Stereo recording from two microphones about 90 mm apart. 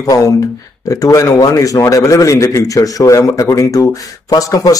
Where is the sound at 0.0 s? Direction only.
40° left (ahead or behind).